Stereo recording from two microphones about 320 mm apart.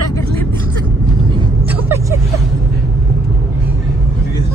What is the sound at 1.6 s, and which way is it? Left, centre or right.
Vehicle, centre.